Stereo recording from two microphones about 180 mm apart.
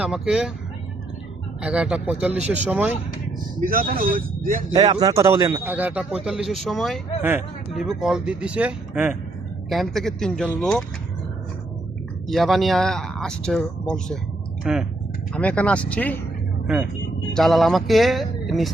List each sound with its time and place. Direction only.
0.0 s speech: 5° right (ahead or behind)
1.6 s a man's voice: 5° right (ahead or behind)
3.6 s speech: 50° right (ahead or behind)
4.7 s a man's voice: 30° right (ahead or behind); by 7.0 s centre (ahead or behind)
7.2 s a man's voice: 10° right (ahead or behind)
12.3 s speech: centre (ahead or behind)
15.3 s speech: 5° left (ahead or behind)
17.3 s speech: centre (ahead or behind)